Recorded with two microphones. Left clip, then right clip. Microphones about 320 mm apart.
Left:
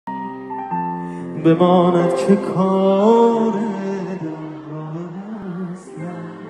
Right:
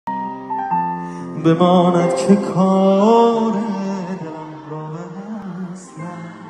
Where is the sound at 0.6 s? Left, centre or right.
Right.